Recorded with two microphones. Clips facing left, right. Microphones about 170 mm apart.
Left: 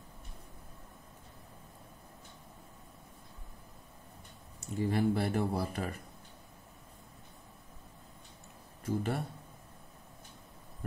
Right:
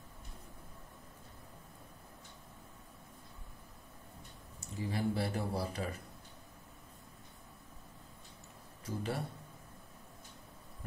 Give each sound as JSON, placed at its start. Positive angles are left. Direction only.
{"t": 4.6, "sound": "speech", "side_deg": 60}
{"t": 8.8, "sound": "speech", "side_deg": 50}